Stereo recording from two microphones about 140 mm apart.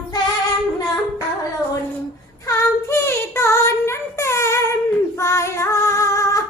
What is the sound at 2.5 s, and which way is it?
Child singing, 20° left (ahead or behind).